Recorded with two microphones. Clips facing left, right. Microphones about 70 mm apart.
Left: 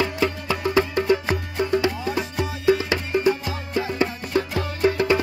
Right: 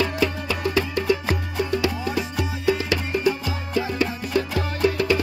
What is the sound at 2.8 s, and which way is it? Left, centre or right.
Music, left.